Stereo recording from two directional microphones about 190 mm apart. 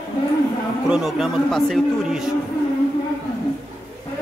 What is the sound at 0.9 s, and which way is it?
A man's voice, centre (ahead or behind).